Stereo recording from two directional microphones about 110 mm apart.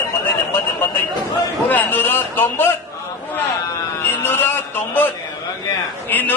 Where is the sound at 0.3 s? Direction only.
20° left (ahead or behind).